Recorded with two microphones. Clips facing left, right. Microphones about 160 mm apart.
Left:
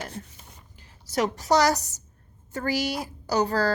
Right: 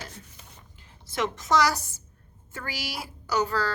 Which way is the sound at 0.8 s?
40° left (ahead or behind).